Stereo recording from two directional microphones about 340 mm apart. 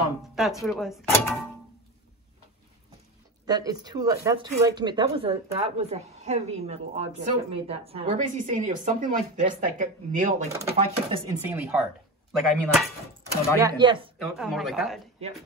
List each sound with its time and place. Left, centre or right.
0.4 s speech: centre
3.4 s speech: centre
12.3 s speech: centre
13.6 s speech: centre
14.1 s speech: centre